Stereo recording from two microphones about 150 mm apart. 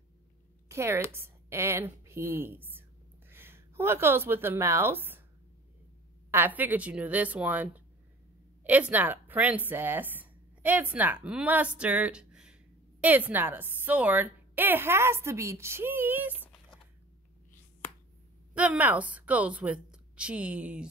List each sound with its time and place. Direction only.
0.7 s a woman's voice: 20° right (ahead or behind)
6.3 s a woman's voice: 10° right (ahead or behind)
18.5 s a woman's voice: 10° right (ahead or behind)